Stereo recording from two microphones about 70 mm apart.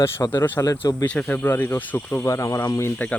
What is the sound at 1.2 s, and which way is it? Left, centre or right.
Speech, left.